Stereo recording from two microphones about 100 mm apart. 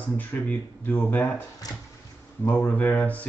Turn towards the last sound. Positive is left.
turn(degrees=15)  # may be behind; listen again after turning